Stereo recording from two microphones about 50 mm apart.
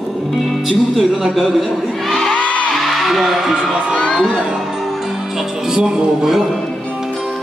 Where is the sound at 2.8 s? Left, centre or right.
Centre.